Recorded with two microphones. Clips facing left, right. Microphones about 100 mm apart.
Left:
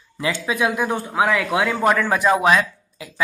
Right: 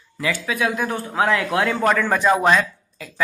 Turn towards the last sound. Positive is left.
turn(degrees=15)  # may be behind; listen again after turning